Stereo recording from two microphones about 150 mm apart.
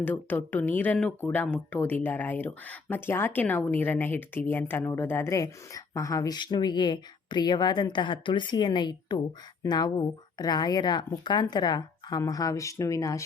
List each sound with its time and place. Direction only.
0.0 s speech: 10° left (ahead or behind)